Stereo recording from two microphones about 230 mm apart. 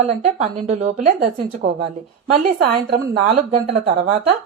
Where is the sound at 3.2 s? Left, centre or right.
Right.